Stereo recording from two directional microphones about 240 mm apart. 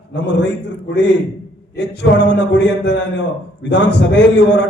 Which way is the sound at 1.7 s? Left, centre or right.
Left.